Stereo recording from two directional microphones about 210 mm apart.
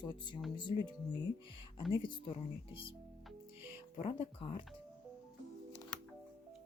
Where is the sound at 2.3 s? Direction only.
25° left (ahead or behind).